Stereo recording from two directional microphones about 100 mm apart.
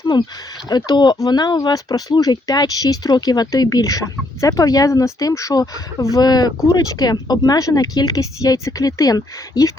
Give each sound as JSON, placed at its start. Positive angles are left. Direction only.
{"t": 0.1, "sound": "speech", "side_deg": 50}